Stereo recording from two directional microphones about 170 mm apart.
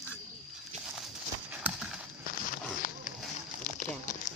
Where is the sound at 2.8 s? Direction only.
50° left (ahead or behind).